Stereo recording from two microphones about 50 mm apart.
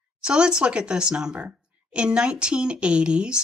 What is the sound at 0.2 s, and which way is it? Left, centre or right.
Speech, centre.